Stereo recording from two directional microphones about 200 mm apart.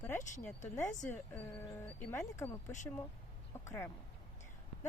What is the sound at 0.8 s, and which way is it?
Speech, 10° left (ahead or behind).